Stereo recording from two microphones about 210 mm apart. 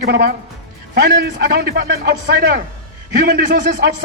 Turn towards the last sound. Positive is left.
turn(degrees=-45)  # may be behind; listen again after turning